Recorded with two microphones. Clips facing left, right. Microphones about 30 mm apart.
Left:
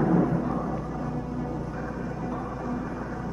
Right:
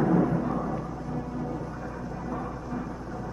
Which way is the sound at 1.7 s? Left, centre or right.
Centre.